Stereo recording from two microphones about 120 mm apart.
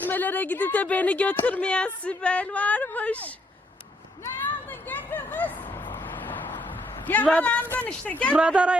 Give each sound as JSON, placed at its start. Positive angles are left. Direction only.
{"t": 0.0, "sound": "speech", "side_deg": 15}
{"t": 4.2, "sound": "vehicle", "side_deg": 15}
{"t": 7.1, "sound": "speech", "side_deg": 10}
{"t": 8.4, "sound": "a woman's voice", "side_deg": -10}